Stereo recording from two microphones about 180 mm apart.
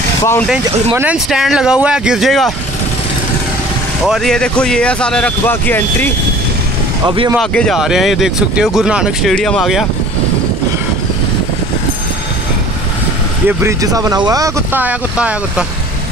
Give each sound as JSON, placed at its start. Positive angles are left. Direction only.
{"t": 0.2, "sound": "speech", "side_deg": 15}
{"t": 0.9, "sound": "speech", "side_deg": -5}
{"t": 4.0, "sound": "speech", "side_deg": 0}
{"t": 7.1, "sound": "speech", "side_deg": -25}
{"t": 7.3, "sound": "speech", "side_deg": 0}
{"t": 13.5, "sound": "speech", "side_deg": -15}